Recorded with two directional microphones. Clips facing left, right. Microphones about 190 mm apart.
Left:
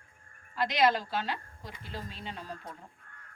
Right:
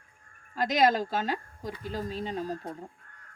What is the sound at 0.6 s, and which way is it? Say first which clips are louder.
Speech: right 3 dB; 45° right (ahead or behind).